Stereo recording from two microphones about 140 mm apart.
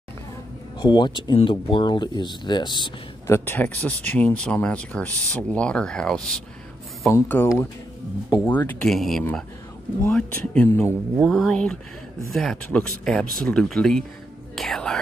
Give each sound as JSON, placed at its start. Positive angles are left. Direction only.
{"t": 0.7, "sound": "speech", "side_deg": 35}
{"t": 3.3, "sound": "speech", "side_deg": 15}
{"t": 7.1, "sound": "speech", "side_deg": 15}
{"t": 10.0, "sound": "speech", "side_deg": 10}
{"t": 10.9, "sound": "speech", "side_deg": -5}